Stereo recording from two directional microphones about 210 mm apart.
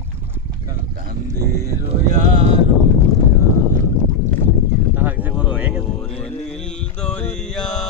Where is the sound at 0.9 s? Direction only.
45° right (ahead or behind).